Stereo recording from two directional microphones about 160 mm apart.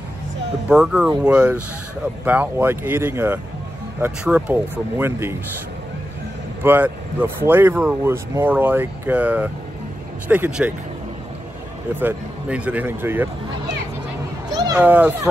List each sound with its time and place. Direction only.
0.7 s speech: 5° right (ahead or behind)
6.6 s speech: 10° right (ahead or behind)
11.9 s speech: 10° right (ahead or behind)
14.8 s speech: 10° right (ahead or behind)